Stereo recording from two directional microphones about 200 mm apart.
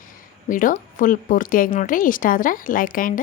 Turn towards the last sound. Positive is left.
turn(degrees=40)  # may be behind; listen again after turning